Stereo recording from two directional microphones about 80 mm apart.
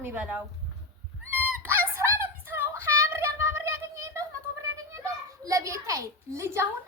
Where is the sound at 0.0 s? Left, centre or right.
Right.